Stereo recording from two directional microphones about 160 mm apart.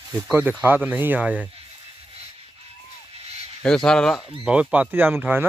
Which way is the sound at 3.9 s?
5° left (ahead or behind).